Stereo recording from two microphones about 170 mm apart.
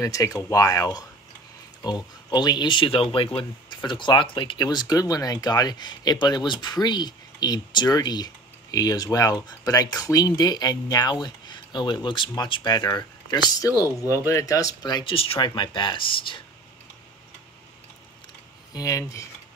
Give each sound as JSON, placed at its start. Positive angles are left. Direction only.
{"t": 0.0, "sound": "speech", "side_deg": 20}
{"t": 18.7, "sound": "speech", "side_deg": 20}